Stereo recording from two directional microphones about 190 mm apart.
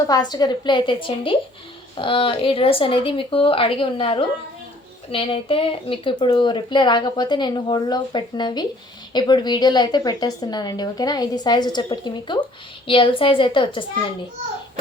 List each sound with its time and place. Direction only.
0.1 s a woman's voice: 20° left (ahead or behind)